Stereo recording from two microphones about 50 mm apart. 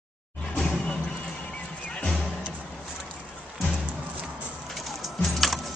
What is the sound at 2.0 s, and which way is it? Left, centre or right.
Music, left.